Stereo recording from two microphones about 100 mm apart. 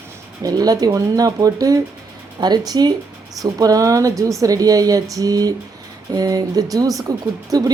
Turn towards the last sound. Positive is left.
turn(degrees=-40)  # may be behind; listen again after turning